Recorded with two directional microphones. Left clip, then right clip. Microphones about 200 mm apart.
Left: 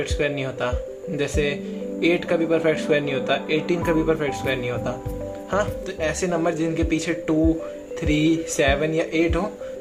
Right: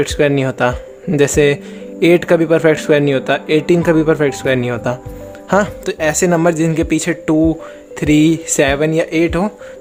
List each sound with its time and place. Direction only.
0.0 s speech: 50° right (ahead or behind)